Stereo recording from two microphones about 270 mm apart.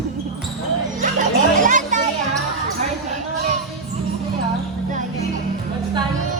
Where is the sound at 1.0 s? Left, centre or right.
Right.